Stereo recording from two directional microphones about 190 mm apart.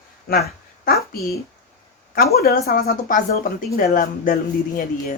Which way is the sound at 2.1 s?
55° left (ahead or behind).